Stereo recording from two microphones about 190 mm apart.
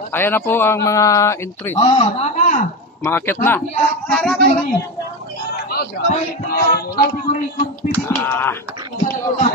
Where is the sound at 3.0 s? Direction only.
10° left (ahead or behind).